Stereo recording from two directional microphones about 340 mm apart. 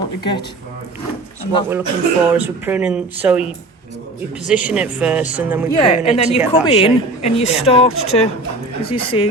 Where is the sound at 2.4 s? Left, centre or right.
Centre.